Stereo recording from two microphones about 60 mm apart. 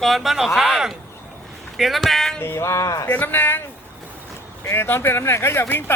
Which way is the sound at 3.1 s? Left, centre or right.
Left.